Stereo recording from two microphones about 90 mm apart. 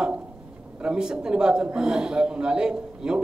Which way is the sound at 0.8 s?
10° right (ahead or behind).